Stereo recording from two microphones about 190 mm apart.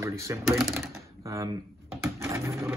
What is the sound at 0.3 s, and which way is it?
Speech, 15° right (ahead or behind).